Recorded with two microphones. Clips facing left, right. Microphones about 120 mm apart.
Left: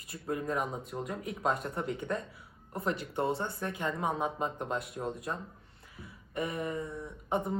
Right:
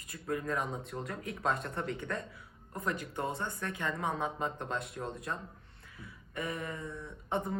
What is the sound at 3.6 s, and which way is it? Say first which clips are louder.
Speech: left 2 dB; 15° left (ahead or behind).